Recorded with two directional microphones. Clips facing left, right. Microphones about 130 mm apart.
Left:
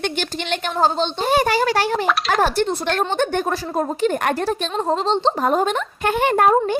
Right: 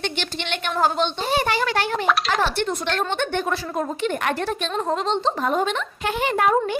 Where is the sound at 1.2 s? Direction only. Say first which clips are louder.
Left 8 dB; 45° left (ahead or behind).